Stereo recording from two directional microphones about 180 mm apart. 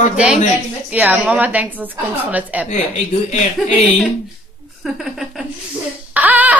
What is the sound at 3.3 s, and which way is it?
Speech, 40° left (ahead or behind).